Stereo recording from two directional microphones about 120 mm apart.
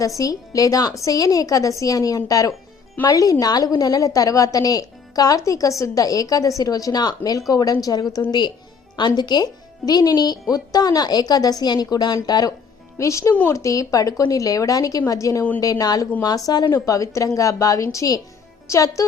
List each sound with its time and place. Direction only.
0.2 s a woman's voice: 30° left (ahead or behind)